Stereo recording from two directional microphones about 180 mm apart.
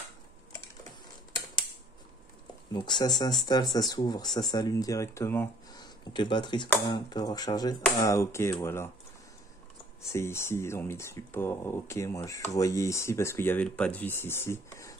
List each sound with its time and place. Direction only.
2.7 s speech: 25° left (ahead or behind)
5.8 s speech: 25° left (ahead or behind)
10.1 s speech: 15° left (ahead or behind)